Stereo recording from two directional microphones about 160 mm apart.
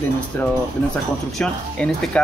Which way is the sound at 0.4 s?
10° left (ahead or behind).